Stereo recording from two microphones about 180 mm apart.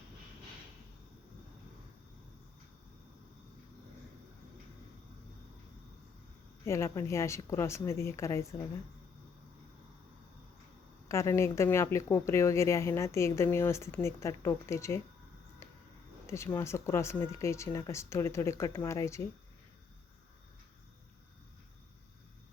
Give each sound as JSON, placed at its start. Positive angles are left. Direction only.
{"t": 6.7, "sound": "a woman's voice", "side_deg": 15}
{"t": 11.1, "sound": "a woman's voice", "side_deg": 15}
{"t": 16.2, "sound": "a woman's voice", "side_deg": 15}